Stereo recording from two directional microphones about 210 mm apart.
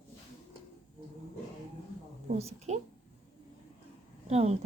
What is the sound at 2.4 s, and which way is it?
Speech, 30° right (ahead or behind).